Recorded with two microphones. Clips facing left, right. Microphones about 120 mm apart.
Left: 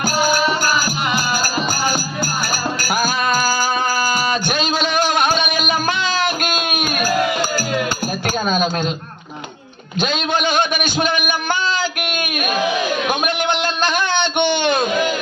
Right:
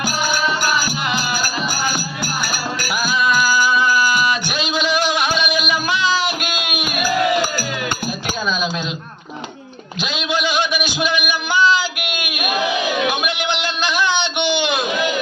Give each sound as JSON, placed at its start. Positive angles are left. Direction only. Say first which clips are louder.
{"t": 0.0, "sound": "music", "louder": "left 3 dB", "side_deg": 40}
{"t": 2.9, "sound": "music", "louder": "even", "side_deg": 45}
{"t": 8.4, "sound": "cutlery", "louder": "left 3 dB", "side_deg": 50}
{"t": 10.0, "sound": "a sound", "louder": "left 2 dB", "side_deg": 50}